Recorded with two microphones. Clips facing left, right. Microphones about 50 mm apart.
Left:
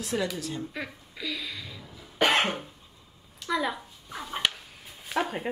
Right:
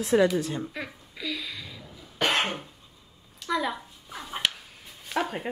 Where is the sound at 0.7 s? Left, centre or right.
Centre.